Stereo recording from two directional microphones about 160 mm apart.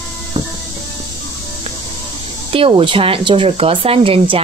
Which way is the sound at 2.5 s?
35° right (ahead or behind).